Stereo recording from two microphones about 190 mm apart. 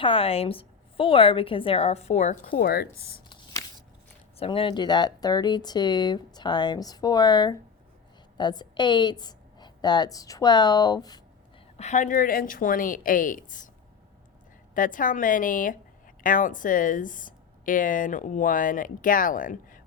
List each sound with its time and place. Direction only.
0.0 s a woman's voice: 30° left (ahead or behind); by 3.2 s 55° left (ahead or behind)
4.4 s speech: 25° left (ahead or behind)
11.8 s a woman's voice: 40° left (ahead or behind)
14.8 s a woman's voice: 45° left (ahead or behind)